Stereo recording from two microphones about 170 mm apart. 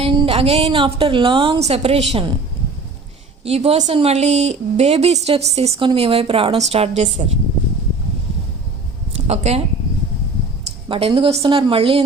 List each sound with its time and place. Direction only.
0.0 s a woman's voice: 30° right (ahead or behind)
3.4 s a woman's voice: 35° right (ahead or behind)
9.2 s speech: 40° right (ahead or behind)
10.8 s a woman's voice: 30° right (ahead or behind)